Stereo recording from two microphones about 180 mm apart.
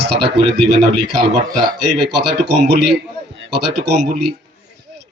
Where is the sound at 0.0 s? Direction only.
70° right (ahead or behind).